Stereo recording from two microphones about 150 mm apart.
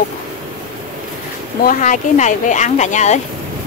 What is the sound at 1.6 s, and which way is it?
Speech, 60° left (ahead or behind).